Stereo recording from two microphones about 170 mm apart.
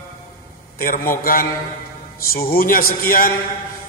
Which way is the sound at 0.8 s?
55° left (ahead or behind).